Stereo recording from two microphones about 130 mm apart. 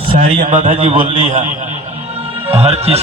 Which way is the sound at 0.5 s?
80° right.